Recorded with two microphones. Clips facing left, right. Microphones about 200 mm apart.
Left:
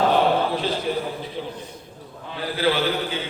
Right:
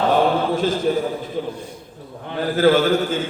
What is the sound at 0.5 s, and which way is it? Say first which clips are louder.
A man's voice: right 5 dB; 45° right (ahead or behind).